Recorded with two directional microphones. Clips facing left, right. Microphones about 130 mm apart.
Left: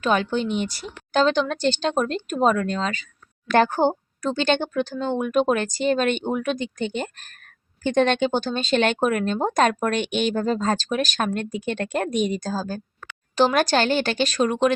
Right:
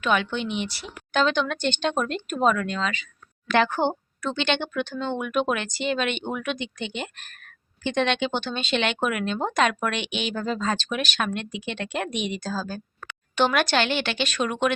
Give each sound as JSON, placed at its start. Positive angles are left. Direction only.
{"t": 0.0, "sound": "a woman's voice", "side_deg": 35}